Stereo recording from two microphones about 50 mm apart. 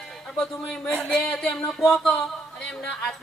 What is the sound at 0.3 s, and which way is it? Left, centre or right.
A woman's voice, centre.